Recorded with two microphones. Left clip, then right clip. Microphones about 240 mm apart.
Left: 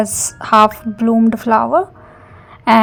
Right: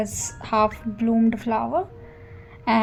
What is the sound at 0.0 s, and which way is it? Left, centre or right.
A woman's voice, left.